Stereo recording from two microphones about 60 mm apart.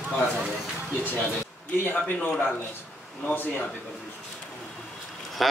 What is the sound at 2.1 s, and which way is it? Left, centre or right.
Speech, centre.